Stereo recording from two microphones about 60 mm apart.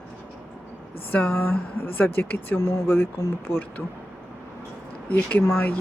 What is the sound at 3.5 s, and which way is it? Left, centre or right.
Speech, left.